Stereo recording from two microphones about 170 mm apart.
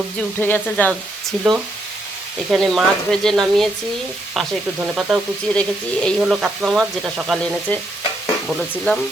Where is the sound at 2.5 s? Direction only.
Centre (ahead or behind).